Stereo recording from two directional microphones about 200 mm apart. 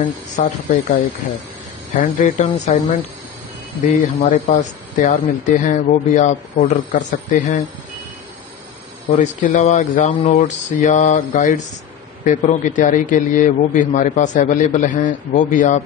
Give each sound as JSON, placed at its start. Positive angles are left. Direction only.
{"t": 0.4, "sound": "speech", "side_deg": 40}
{"t": 2.0, "sound": "speech", "side_deg": 40}
{"t": 9.2, "sound": "speech", "side_deg": 40}